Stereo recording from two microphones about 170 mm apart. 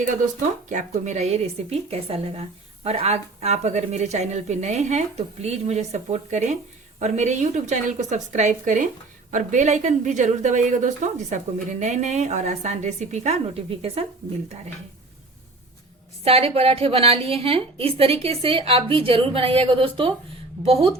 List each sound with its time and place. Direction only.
0.7 s a woman's voice: 45° right (ahead or behind)
16.2 s a woman's voice: 35° right (ahead or behind)